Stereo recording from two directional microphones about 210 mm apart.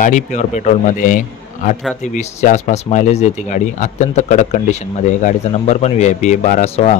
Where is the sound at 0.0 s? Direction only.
35° left (ahead or behind).